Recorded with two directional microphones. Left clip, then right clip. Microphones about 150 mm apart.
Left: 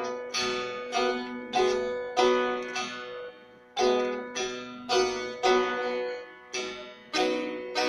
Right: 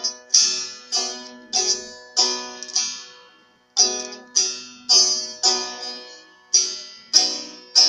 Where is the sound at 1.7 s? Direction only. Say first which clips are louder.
Right 2 dB; 55° left (ahead or behind).